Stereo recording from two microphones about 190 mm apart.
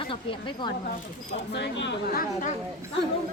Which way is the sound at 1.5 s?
70° left (ahead or behind).